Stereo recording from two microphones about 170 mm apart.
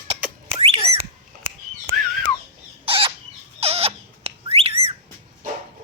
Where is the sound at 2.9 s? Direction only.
35° right (ahead or behind).